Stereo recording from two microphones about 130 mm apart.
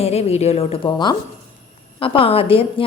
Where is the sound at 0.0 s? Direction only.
50° left (ahead or behind).